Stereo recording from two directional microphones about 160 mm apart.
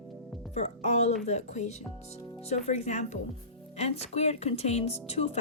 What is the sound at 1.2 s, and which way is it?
A woman's voice, 45° left (ahead or behind).